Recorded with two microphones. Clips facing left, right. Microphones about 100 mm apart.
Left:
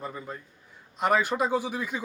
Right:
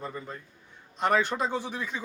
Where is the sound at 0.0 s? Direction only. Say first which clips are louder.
Left 1 dB; 10° left (ahead or behind).